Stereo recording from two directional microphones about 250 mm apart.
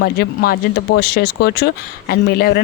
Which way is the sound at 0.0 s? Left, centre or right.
Left.